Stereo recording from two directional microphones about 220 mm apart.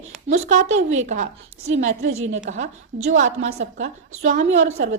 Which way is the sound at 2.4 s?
35° right (ahead or behind).